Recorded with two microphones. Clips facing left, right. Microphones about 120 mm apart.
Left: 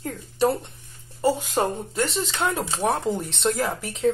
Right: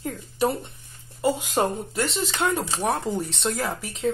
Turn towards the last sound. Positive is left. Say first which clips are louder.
# left 3 dB
turn(degrees=0)  # may be behind; listen again after turning